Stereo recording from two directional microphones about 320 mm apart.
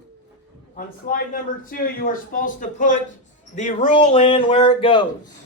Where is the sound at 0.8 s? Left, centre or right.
Left.